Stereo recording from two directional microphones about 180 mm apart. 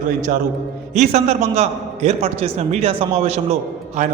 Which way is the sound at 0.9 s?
40° right (ahead or behind).